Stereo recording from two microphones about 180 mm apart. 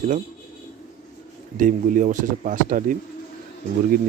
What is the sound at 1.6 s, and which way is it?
Speech, 50° right (ahead or behind).